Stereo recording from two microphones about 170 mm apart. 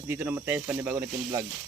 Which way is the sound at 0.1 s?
10° right (ahead or behind).